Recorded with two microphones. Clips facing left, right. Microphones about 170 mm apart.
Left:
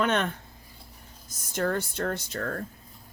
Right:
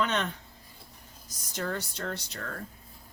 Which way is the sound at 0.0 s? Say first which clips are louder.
Left 4 dB; 55° left (ahead or behind).